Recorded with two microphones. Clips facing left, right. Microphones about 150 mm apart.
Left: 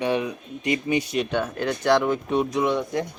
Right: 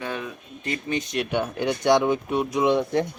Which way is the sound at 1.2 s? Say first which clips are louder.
Even; 10° right (ahead or behind).